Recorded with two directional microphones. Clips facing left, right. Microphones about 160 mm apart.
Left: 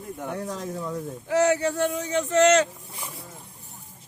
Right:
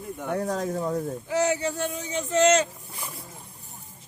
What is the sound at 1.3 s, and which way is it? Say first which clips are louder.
Speech: left 4 dB; 65° left (ahead or behind).